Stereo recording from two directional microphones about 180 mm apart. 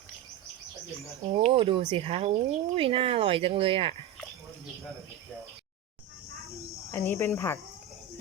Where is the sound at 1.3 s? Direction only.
35° right (ahead or behind).